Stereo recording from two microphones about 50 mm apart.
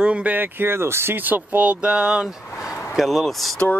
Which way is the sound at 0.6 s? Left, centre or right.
Right.